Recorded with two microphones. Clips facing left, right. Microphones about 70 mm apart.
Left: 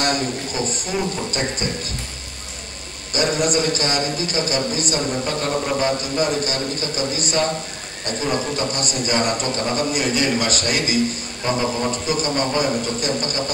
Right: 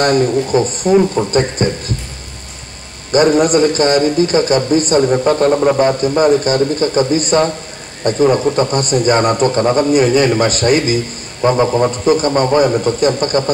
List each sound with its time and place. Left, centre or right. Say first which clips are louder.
0.0 s a man's voice: right 10 dB; right
3.1 s a man's voice: right 10 dB; right